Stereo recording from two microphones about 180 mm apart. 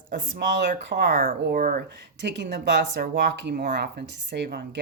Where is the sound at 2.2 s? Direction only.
75° right (ahead or behind).